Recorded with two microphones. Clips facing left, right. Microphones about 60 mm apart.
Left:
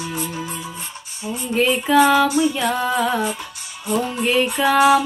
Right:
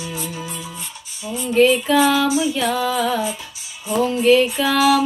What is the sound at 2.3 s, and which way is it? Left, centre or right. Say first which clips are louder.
Music: left 1 dB; left.